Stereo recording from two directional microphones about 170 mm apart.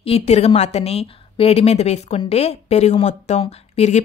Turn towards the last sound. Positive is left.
turn(degrees=40)  # may be behind; listen again after turning